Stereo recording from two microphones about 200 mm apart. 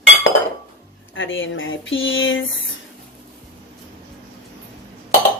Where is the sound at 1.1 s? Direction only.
75° left (ahead or behind).